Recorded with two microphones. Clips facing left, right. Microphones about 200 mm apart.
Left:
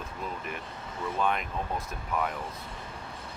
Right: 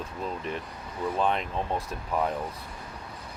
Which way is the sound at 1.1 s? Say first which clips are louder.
Right 2 dB; 30° right (ahead or behind).